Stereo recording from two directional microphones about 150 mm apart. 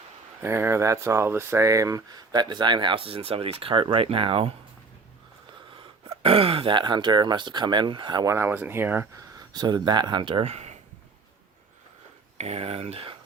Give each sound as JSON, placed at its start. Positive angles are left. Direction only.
{"t": 0.4, "sound": "speech", "side_deg": -15}
{"t": 6.2, "sound": "speech", "side_deg": -40}
{"t": 12.4, "sound": "speech", "side_deg": -45}